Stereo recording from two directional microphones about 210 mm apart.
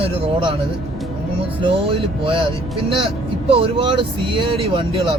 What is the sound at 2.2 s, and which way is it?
Speech, 25° right (ahead or behind).